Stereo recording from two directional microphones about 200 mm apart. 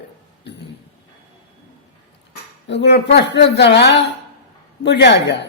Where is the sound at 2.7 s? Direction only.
60° left (ahead or behind).